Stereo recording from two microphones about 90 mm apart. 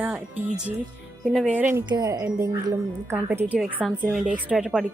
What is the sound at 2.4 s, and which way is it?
Speech, 40° right (ahead or behind).